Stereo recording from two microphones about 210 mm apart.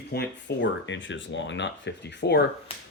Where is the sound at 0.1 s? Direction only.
50° left (ahead or behind).